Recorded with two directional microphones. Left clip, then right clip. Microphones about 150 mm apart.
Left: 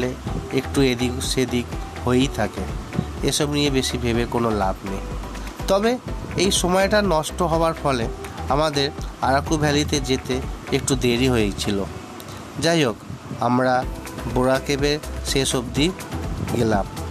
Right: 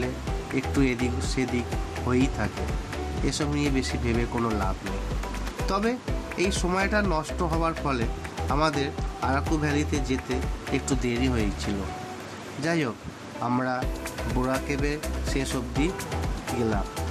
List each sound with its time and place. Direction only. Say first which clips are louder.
0.6 s speech: left 6 dB; 55° left (ahead or behind)
5.7 s speech: left 8 dB; 60° left (ahead or behind)